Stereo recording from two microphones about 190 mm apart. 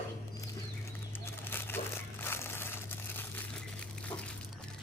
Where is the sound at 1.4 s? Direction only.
10° left (ahead or behind).